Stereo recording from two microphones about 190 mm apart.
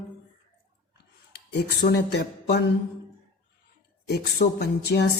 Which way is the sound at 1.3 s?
60° left (ahead or behind).